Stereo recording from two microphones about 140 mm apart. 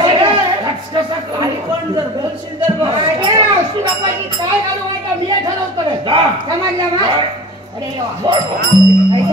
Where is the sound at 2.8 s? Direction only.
30° right (ahead or behind).